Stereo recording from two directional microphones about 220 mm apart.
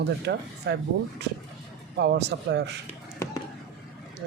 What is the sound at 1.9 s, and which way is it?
Speech, 50° right (ahead or behind).